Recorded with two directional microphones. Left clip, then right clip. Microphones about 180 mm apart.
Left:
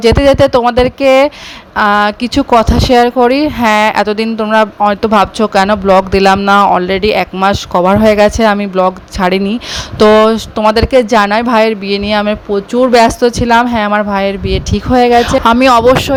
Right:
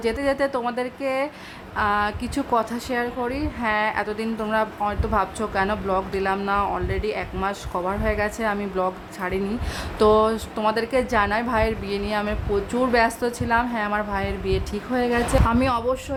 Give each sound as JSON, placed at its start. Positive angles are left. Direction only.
{"t": 0.0, "sound": "a woman's voice", "side_deg": 45}